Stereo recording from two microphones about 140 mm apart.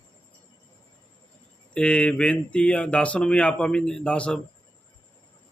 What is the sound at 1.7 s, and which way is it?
Speech, 10° left (ahead or behind).